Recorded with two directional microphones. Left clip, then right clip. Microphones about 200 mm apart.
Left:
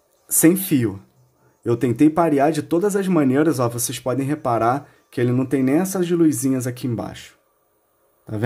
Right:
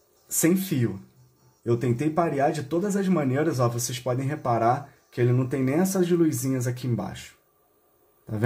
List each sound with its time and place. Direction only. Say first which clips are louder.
0.3 s speech: left 8 dB; 50° left (ahead or behind)